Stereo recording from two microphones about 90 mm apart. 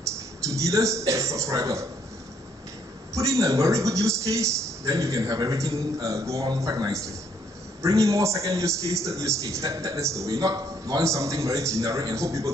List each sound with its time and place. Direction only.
0.0 s a man's voice: 35° right (ahead or behind)
3.2 s a man's voice: 35° right (ahead or behind)